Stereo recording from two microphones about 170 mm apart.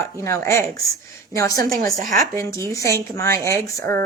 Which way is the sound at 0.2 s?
15° left (ahead or behind).